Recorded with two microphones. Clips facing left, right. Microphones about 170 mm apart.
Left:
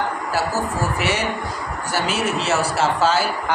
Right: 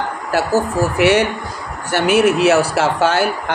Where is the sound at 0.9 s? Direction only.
65° right (ahead or behind).